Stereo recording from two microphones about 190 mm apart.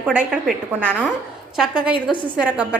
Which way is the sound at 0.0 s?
10° right (ahead or behind).